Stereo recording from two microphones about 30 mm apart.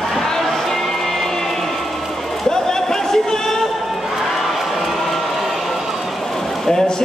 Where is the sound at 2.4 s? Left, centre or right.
Centre.